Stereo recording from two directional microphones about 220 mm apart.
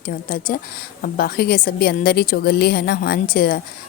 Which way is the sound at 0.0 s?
40° left (ahead or behind).